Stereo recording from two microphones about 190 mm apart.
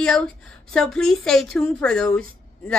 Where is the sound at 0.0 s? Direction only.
5° left (ahead or behind).